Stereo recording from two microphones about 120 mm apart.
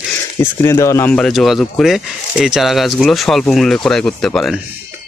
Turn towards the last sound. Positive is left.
turn(degrees=5)  # may be behind; listen again after turning